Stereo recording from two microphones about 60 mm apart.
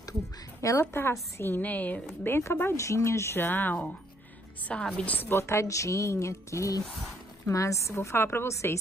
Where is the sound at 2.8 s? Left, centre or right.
Left.